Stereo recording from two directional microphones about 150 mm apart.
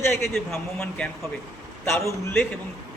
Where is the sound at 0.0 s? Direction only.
15° left (ahead or behind).